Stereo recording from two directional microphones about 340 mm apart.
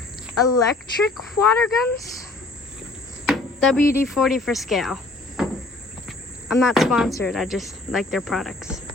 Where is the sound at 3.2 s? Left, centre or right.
Centre.